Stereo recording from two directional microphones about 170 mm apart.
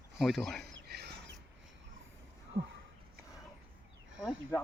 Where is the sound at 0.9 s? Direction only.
80° right.